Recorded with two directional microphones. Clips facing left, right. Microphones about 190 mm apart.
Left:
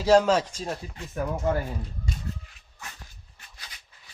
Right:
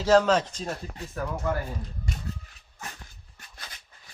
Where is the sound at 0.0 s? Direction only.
10° left (ahead or behind).